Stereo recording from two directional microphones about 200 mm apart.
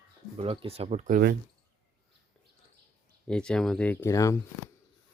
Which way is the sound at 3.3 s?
5° left (ahead or behind).